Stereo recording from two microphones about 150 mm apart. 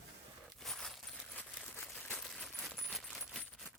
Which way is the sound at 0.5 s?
Centre (ahead or behind).